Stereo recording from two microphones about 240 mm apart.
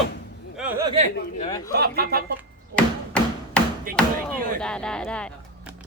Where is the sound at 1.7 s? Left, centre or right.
Right.